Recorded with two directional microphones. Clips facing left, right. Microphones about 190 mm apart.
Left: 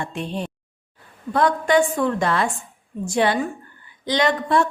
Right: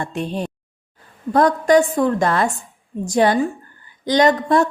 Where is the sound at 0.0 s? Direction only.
40° right (ahead or behind).